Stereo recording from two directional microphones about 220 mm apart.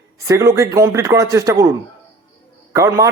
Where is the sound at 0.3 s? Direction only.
15° right (ahead or behind).